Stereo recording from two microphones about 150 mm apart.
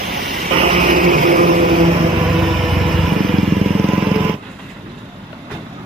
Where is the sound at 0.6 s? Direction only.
55° right (ahead or behind).